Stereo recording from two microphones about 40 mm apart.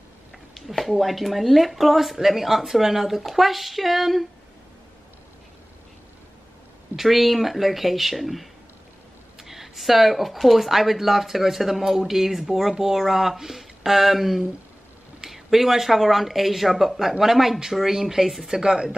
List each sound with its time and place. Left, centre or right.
0.7 s speech: centre
7.0 s speech: centre